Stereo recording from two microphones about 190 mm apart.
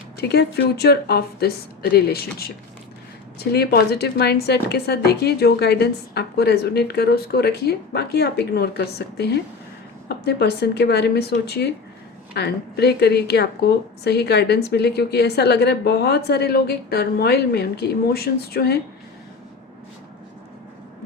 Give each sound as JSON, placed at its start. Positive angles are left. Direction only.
{"t": 0.2, "sound": "a woman's voice", "side_deg": 60}
{"t": 3.5, "sound": "a woman's voice", "side_deg": 55}